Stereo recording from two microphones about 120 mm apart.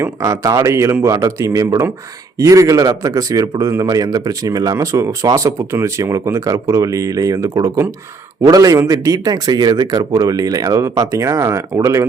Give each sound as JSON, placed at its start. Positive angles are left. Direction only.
{"t": 0.0, "sound": "a man's voice", "side_deg": -25}